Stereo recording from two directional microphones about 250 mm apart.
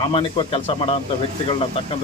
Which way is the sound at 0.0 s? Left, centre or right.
Left.